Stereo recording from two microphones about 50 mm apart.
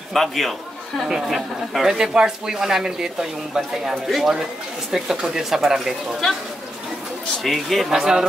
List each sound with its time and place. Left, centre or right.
0.1 s a man's voice: centre
1.0 s speech: centre
1.9 s speech: centre
7.4 s speech: centre
7.9 s speech: centre